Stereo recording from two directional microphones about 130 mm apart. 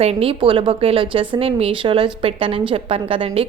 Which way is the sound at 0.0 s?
50° right (ahead or behind).